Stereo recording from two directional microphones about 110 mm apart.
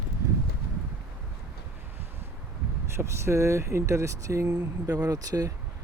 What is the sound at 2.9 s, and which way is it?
Speech, 25° right (ahead or behind).